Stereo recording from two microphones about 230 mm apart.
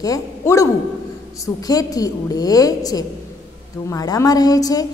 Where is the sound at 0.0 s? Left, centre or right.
Centre.